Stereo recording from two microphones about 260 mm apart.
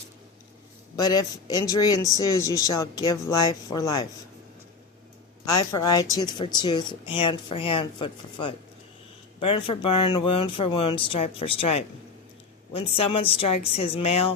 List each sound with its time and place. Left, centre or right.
0.9 s speech: centre
5.5 s speech: centre